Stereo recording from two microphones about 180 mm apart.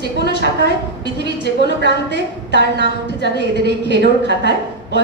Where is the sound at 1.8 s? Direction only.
70° right (ahead or behind).